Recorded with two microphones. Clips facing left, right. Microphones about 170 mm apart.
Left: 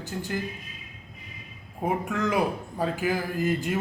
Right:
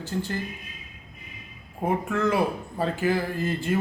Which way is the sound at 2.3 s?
15° left (ahead or behind).